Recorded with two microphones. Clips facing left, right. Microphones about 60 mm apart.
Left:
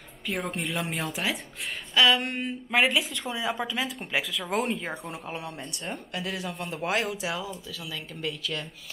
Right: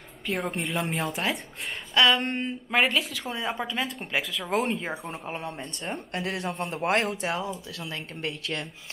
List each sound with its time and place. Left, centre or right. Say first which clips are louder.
0.3 s speech: right 2 dB; centre
4.6 s speech: right 1 dB; centre
5.2 s speech: right 2 dB; right
6.1 s speech: right 3 dB; right